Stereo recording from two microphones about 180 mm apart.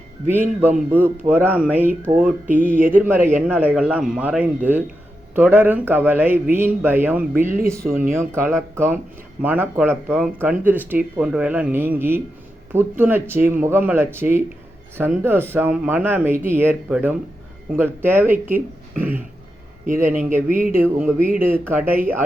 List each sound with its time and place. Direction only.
0.9 s a man's voice: 10° right (ahead or behind)
19.9 s speech: 45° right (ahead or behind)
20.7 s a man's voice: 10° right (ahead or behind)